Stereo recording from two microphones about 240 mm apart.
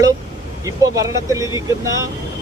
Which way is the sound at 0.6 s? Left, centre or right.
Centre.